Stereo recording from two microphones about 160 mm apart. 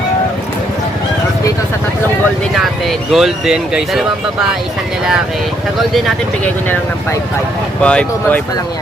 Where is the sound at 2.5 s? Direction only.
Centre (ahead or behind).